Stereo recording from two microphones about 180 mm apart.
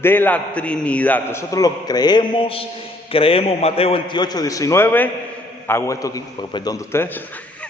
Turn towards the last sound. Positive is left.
turn(degrees=15)  # may be behind; listen again after turning